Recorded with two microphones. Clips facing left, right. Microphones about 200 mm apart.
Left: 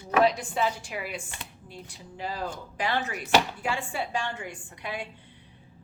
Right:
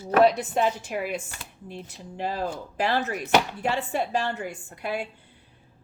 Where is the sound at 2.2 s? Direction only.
45° right (ahead or behind).